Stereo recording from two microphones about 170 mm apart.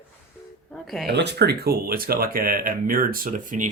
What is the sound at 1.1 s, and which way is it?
Speech, 80° right.